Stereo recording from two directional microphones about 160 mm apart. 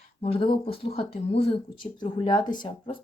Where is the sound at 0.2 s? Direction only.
35° left (ahead or behind).